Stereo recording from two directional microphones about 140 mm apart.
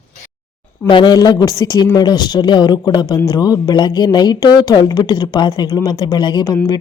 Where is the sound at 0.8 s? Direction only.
35° left (ahead or behind).